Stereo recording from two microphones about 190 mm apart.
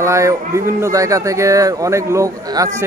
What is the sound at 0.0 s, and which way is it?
Speech, 15° right (ahead or behind).